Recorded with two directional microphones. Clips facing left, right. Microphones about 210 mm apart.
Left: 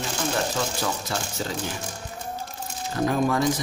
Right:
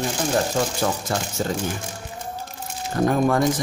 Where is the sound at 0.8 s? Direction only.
45° right (ahead or behind).